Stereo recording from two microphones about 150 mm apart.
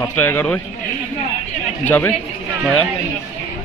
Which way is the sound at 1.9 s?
10° left (ahead or behind).